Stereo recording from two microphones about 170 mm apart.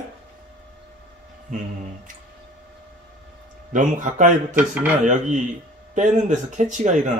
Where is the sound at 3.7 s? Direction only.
50° right (ahead or behind).